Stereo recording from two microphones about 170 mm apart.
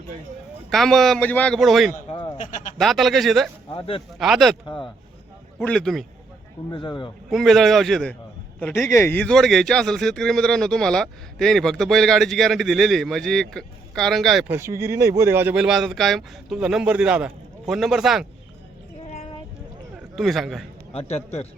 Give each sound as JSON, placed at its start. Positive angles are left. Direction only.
{"t": 0.7, "sound": "speech", "side_deg": 0}
{"t": 2.0, "sound": "bleat", "side_deg": 30}
{"t": 2.4, "sound": "speech", "side_deg": 50}
{"t": 2.7, "sound": "speech", "side_deg": 0}
{"t": 3.7, "sound": "a man's voice", "side_deg": 30}
{"t": 4.2, "sound": "speech", "side_deg": 0}
{"t": 4.6, "sound": "speech", "side_deg": 30}
{"t": 5.6, "sound": "speech", "side_deg": 5}
{"t": 6.7, "sound": "speech", "side_deg": 25}
{"t": 7.3, "sound": "speech", "side_deg": 0}
{"t": 14.4, "sound": "speech", "side_deg": -15}
{"t": 20.1, "sound": "speech", "side_deg": 0}
{"t": 20.9, "sound": "a man's voice", "side_deg": 40}